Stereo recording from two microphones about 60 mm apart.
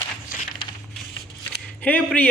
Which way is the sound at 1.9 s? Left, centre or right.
Left.